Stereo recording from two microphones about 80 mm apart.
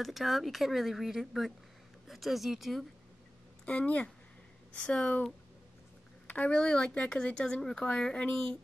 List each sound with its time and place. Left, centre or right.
0.0 s speech: centre
3.6 s speech: centre